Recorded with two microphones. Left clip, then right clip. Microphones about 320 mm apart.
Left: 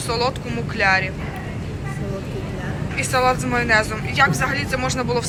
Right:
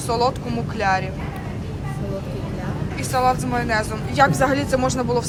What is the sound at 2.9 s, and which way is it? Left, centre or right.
Speech, centre.